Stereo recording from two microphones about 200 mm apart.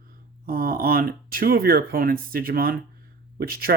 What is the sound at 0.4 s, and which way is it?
Speech, 45° right (ahead or behind).